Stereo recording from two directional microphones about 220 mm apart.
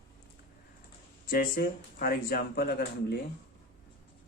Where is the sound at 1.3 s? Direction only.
40° left (ahead or behind).